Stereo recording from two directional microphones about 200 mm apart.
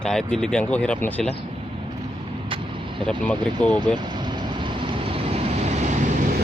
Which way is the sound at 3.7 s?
20° right (ahead or behind).